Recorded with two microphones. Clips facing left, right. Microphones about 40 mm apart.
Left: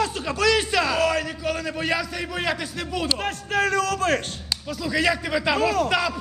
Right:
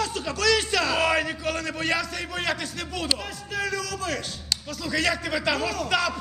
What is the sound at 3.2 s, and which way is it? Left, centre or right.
A man's voice, left.